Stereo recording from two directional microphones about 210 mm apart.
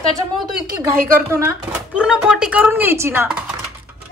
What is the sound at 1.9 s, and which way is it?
Speech, 5° right (ahead or behind).